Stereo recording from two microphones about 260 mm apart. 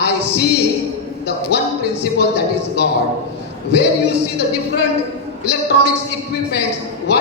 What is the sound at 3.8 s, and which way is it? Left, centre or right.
Speech, left.